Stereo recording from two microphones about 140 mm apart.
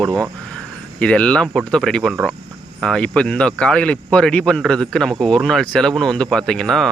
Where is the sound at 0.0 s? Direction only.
5° left (ahead or behind).